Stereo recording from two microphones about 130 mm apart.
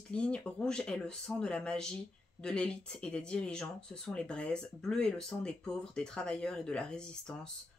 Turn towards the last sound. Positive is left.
turn(degrees=5)  # may be behind; listen again after turning